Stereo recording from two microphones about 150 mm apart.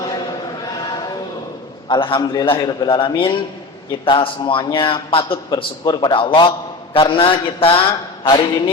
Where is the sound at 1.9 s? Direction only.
35° left (ahead or behind).